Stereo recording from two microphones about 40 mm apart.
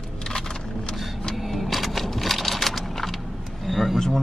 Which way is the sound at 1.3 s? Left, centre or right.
Centre.